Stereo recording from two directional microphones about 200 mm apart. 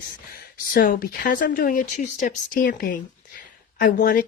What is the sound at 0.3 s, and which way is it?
Speech, 45° left (ahead or behind).